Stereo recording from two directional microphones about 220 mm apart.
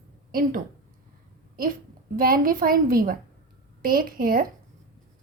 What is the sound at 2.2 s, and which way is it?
A woman's voice, 40° right (ahead or behind).